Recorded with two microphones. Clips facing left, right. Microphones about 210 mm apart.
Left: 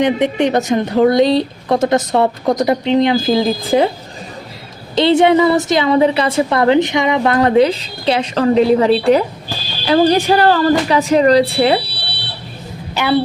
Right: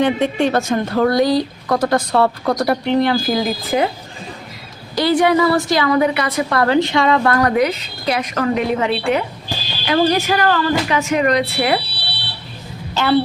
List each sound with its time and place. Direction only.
0.0 s a woman's voice: 20° left (ahead or behind)
4.9 s a woman's voice: 25° left (ahead or behind)
12.9 s a woman's voice: 15° left (ahead or behind)